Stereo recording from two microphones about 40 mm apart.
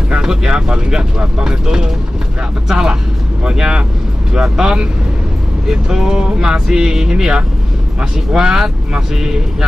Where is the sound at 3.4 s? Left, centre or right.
Right.